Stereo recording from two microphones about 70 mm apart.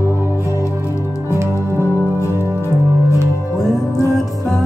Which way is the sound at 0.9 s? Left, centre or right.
Left.